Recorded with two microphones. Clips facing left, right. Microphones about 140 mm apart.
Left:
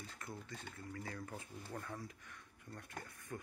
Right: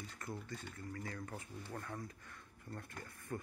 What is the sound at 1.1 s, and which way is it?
Speech, centre (ahead or behind).